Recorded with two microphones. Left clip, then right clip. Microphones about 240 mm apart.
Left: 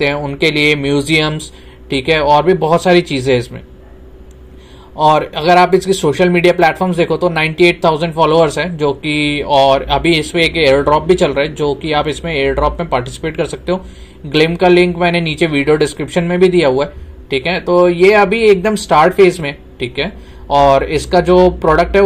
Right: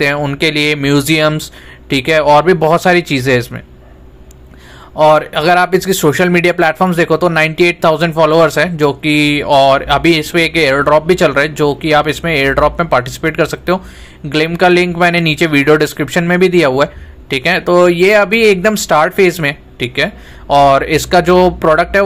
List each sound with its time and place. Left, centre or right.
0.0 s speech: right
5.1 s speech: right
7.1 s speech: right
7.3 s speech: right